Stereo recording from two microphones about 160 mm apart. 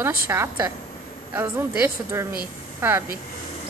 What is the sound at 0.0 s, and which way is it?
A woman's voice, 15° right (ahead or behind).